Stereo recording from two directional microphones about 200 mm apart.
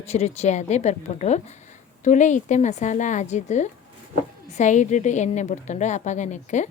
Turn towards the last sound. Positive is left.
turn(degrees=35)  # may be behind; listen again after turning